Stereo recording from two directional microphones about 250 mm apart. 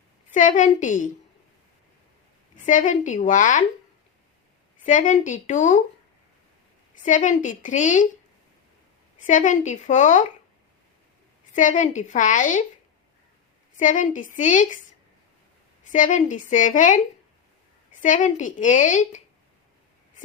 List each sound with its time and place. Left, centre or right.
0.3 s a woman's voice: left
2.6 s a woman's voice: left
4.8 s a woman's voice: left
7.0 s a woman's voice: left
9.2 s a woman's voice: left
11.5 s a woman's voice: left
13.7 s a woman's voice: left
15.9 s a woman's voice: left
18.0 s a woman's voice: left